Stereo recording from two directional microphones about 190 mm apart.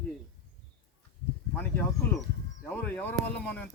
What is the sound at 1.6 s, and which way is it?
A man's voice, 10° left (ahead or behind).